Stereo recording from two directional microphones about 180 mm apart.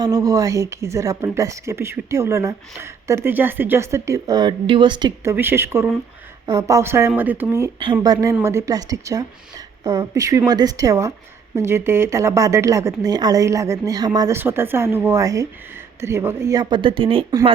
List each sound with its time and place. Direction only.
0.0 s speech: 20° right (ahead or behind)